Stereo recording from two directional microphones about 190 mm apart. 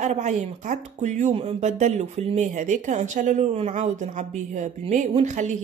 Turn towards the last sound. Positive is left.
turn(degrees=-40)  # may be behind; listen again after turning